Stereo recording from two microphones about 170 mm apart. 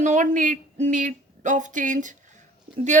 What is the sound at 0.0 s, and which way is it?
Speech, 45° right (ahead or behind).